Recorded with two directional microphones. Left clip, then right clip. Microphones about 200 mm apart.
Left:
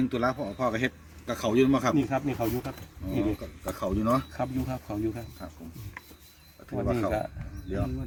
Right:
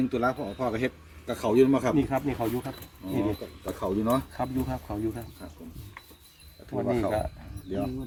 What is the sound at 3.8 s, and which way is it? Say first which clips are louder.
Speech: even; 35° left (ahead or behind).